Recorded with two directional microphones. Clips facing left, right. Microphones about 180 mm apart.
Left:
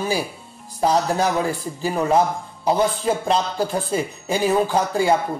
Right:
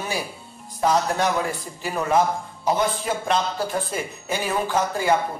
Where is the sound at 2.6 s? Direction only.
30° left (ahead or behind).